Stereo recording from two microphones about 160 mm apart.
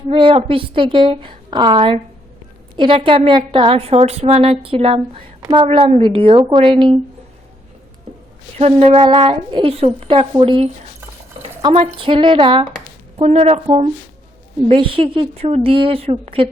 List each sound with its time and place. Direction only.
0.1 s a woman's voice: 35° right (ahead or behind)
8.5 s a woman's voice: 40° right (ahead or behind)
11.7 s a woman's voice: 40° right (ahead or behind)
13.1 s a woman's voice: 40° right (ahead or behind)